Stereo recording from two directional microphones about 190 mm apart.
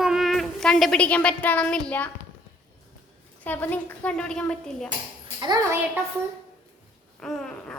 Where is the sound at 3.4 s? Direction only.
10° left (ahead or behind).